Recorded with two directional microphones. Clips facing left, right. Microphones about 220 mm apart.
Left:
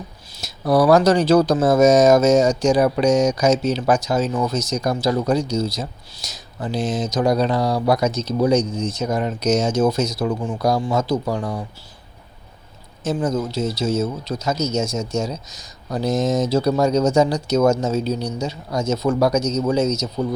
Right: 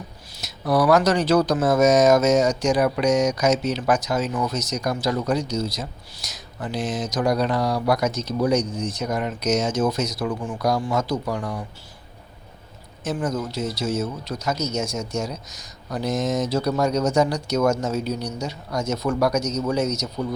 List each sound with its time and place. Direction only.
0.4 s speech: 30° left (ahead or behind)
13.1 s speech: 25° left (ahead or behind)